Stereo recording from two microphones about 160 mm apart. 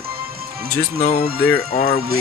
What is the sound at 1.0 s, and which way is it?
Speech, 40° left (ahead or behind).